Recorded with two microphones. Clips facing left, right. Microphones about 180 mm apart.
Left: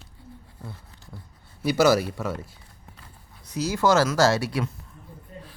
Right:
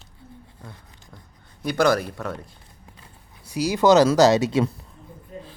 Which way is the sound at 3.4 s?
10° right (ahead or behind).